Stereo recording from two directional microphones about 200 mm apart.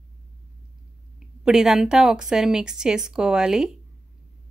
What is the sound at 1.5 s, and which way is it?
Speech, 5° right (ahead or behind).